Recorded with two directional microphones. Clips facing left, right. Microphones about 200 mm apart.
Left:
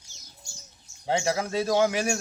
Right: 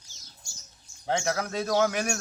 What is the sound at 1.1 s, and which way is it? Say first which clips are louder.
Speech: left 2 dB; 5° left (ahead or behind).